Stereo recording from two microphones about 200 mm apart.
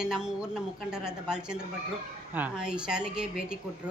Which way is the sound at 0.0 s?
5° right (ahead or behind).